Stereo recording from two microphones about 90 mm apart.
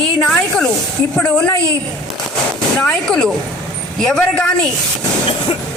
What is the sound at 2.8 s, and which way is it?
Speech, 10° left (ahead or behind).